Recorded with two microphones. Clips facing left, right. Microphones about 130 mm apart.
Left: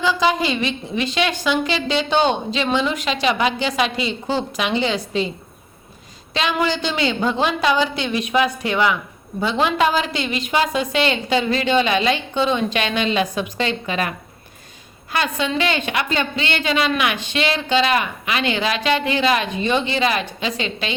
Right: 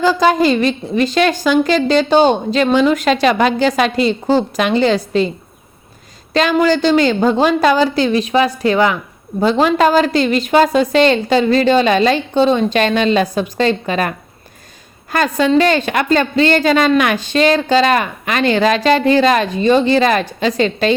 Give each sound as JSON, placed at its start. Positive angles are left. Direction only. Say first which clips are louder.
{"t": 0.0, "sound": "a woman's voice", "louder": "right 6 dB", "side_deg": -45}
{"t": 6.3, "sound": "a woman's voice", "louder": "right 8 dB", "side_deg": -45}
{"t": 15.1, "sound": "a woman's voice", "louder": "right 9 dB", "side_deg": -45}